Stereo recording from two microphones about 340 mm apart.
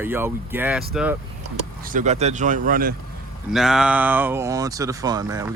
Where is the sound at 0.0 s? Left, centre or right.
Centre.